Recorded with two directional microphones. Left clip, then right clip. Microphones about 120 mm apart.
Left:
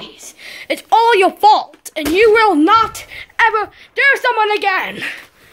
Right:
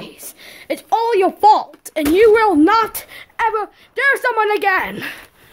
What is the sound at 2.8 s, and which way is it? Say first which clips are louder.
Speech: left 2 dB; 90° right.